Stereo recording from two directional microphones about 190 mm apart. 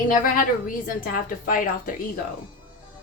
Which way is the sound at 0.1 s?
45° left (ahead or behind).